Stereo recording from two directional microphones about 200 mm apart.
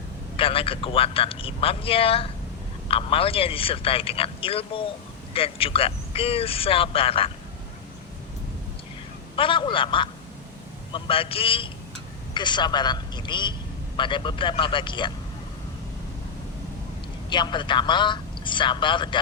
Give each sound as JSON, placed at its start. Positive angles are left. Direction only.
{"t": 0.3, "sound": "a man's voice", "side_deg": 25}
{"t": 9.3, "sound": "a man's voice", "side_deg": 25}
{"t": 17.2, "sound": "a man's voice", "side_deg": 20}